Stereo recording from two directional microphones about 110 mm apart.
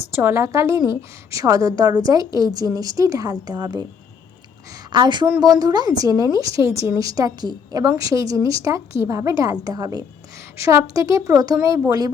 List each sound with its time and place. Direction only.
0.2 s a woman's voice: 25° right (ahead or behind)
4.9 s a woman's voice: 45° right (ahead or behind)